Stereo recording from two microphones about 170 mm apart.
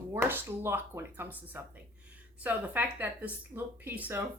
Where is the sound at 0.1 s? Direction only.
15° right (ahead or behind).